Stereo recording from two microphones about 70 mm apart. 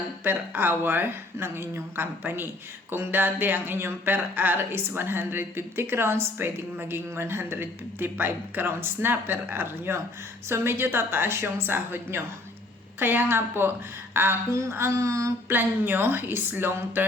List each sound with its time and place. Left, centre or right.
0.3 s speech: right
14.5 s a sound: right
15.4 s speech: right